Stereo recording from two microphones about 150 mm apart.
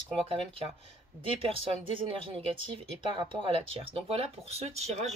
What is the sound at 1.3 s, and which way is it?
Speech, 40° right (ahead or behind).